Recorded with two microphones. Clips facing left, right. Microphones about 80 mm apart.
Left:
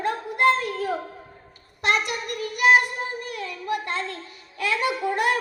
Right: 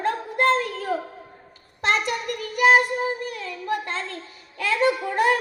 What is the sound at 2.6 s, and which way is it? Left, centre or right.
Child singing, right.